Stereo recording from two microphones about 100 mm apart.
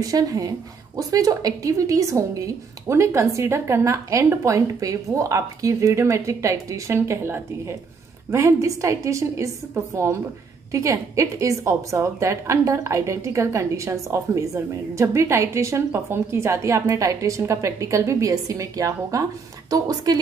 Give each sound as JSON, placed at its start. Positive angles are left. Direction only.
{"t": 0.0, "sound": "a woman's voice", "side_deg": -35}